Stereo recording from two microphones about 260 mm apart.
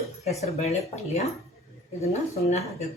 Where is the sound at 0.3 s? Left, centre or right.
Left.